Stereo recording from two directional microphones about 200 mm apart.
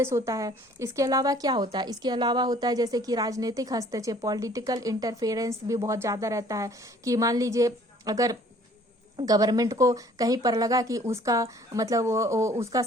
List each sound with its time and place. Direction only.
0.0 s a woman's voice: 15° right (ahead or behind)